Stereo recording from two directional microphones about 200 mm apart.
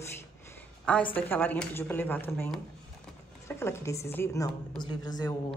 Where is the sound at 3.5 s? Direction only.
10° left (ahead or behind).